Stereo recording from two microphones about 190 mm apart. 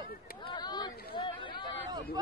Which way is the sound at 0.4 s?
25° left (ahead or behind).